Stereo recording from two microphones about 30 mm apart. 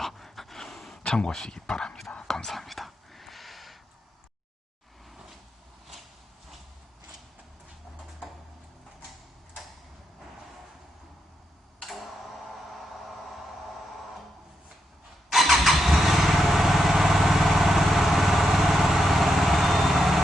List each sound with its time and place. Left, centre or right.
0.0 s dog: centre
1.0 s speech: left
2.2 s whispering: centre
2.5 s whispering: centre
11.8 s tick-tock: centre
15.3 s vehicle: centre